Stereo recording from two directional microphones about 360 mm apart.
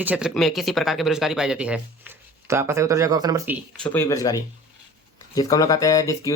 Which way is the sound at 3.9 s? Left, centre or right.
Centre.